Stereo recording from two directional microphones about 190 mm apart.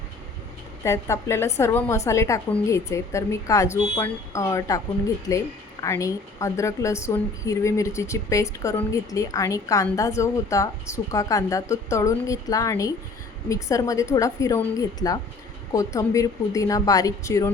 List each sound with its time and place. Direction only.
0.9 s a woman's voice: 15° left (ahead or behind)